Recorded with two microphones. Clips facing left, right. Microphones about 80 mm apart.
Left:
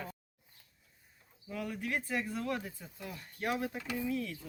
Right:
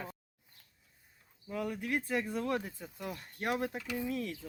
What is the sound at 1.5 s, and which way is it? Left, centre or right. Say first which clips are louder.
Speech: right 2 dB; right.